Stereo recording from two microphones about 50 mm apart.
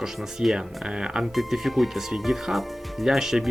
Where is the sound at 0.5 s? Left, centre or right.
Centre.